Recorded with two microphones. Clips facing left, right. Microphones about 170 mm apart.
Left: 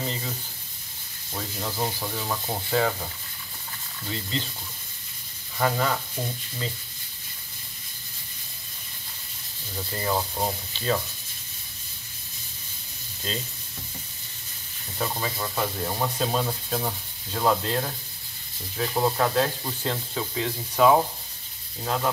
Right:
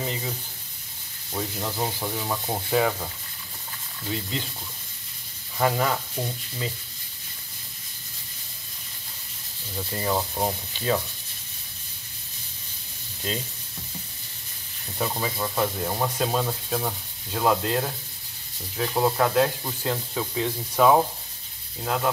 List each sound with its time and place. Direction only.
1.6 s speech: 15° right (ahead or behind)
4.1 s speech: 10° right (ahead or behind)
5.6 s speech: 10° right (ahead or behind)
9.9 s speech: 5° right (ahead or behind)
15.0 s speech: 5° right (ahead or behind)